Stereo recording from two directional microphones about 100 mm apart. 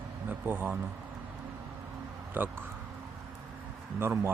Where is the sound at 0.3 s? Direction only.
20° right (ahead or behind).